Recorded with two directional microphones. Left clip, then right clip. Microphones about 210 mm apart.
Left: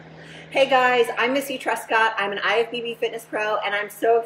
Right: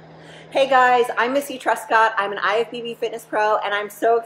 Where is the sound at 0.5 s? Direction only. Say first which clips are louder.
Right 2 dB; 15° right (ahead or behind).